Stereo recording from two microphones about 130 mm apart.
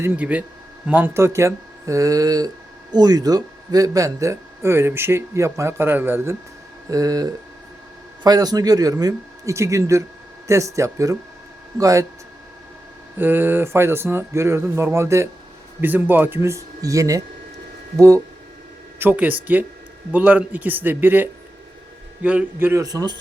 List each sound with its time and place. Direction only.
0.2 s a man's voice: 10° right (ahead or behind)
13.1 s a man's voice: 15° right (ahead or behind)
18.9 s a man's voice: 15° right (ahead or behind)